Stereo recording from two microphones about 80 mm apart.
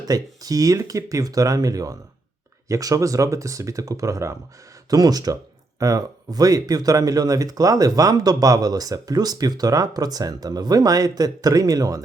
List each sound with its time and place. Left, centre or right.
0.0 s speech: right
4.9 s speech: right